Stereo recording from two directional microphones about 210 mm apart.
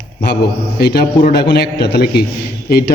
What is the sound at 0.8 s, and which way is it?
A man's voice, 50° left (ahead or behind).